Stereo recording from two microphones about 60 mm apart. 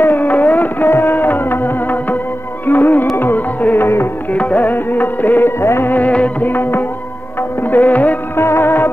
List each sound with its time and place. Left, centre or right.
0.0 s a sound: left
0.8 s music: left
4.3 s music: left
5.6 s music: left
5.9 s music: left
6.5 s music: left
7.6 s music of bollywood: left
8.4 s music: left